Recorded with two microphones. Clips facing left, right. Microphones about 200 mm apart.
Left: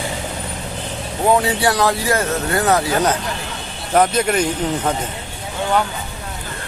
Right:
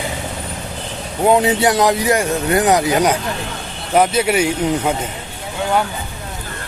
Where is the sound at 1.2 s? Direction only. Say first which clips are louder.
Right 3 dB; 20° right (ahead or behind).